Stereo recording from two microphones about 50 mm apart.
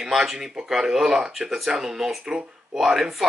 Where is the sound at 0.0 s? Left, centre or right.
Centre.